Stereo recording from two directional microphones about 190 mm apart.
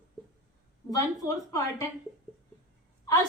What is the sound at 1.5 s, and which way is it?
Speech, 15° left (ahead or behind).